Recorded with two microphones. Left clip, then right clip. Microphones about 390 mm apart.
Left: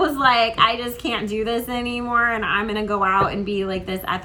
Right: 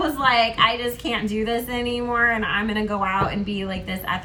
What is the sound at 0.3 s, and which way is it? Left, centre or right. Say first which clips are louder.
A woman's voice: left 1 dB; centre.